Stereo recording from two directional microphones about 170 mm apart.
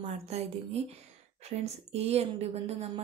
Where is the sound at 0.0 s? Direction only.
40° right (ahead or behind).